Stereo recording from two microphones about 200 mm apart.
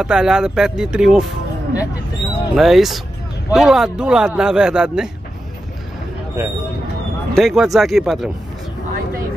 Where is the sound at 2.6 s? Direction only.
Centre (ahead or behind).